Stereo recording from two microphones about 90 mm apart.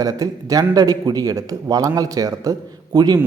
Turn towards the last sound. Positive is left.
turn(degrees=-45)  # may be behind; listen again after turning